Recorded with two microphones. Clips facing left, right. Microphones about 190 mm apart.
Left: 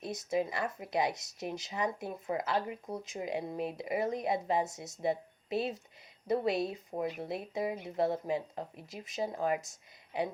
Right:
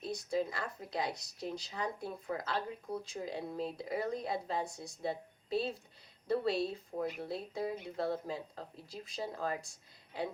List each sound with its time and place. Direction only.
0.0 s speech: 20° left (ahead or behind)
6.2 s speech: 20° left (ahead or behind)